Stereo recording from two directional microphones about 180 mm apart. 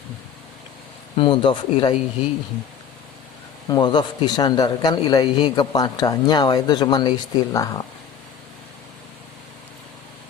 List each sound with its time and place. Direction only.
1.1 s a man's voice: 30° left (ahead or behind)
3.7 s a man's voice: 25° left (ahead or behind)